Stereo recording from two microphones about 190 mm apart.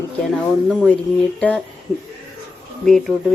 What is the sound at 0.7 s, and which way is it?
Speech, centre (ahead or behind).